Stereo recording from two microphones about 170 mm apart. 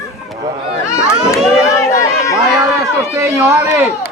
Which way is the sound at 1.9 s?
15° left (ahead or behind).